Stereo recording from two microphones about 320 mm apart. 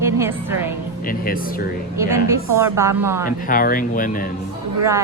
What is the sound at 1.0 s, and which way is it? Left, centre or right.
Speech, left.